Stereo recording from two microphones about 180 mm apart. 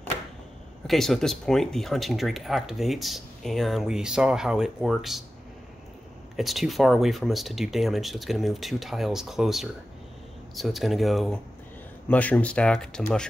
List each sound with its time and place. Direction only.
0.8 s speech: centre (ahead or behind)
6.3 s speech: centre (ahead or behind)